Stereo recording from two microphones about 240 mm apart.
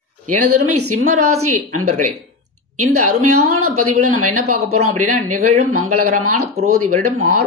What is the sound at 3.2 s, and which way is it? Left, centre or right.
Speech, right.